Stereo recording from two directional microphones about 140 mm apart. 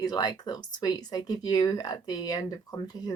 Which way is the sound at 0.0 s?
30° left (ahead or behind).